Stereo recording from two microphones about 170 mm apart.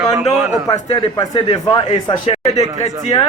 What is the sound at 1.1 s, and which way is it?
A man's voice, 20° left (ahead or behind).